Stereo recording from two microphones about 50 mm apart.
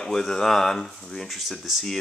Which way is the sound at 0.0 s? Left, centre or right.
Centre.